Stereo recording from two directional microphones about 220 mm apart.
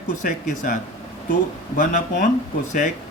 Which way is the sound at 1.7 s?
35° left (ahead or behind).